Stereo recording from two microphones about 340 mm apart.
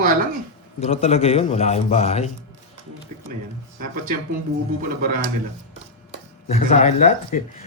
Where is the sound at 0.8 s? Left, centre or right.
Centre.